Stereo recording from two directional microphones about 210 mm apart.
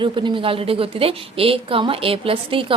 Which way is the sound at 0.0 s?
20° right (ahead or behind).